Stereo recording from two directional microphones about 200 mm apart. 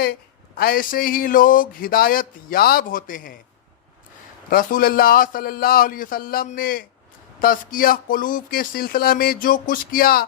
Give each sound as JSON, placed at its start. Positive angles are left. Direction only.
{"t": 0.5, "sound": "speech", "side_deg": 45}
{"t": 4.4, "sound": "speech", "side_deg": 45}